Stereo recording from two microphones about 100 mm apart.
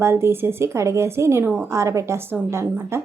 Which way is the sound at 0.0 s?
25° right (ahead or behind).